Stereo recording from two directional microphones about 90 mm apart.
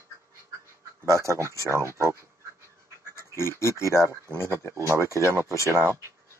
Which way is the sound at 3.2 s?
30° left (ahead or behind).